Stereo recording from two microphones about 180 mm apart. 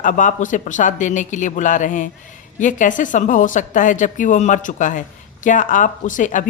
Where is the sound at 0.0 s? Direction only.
45° left (ahead or behind).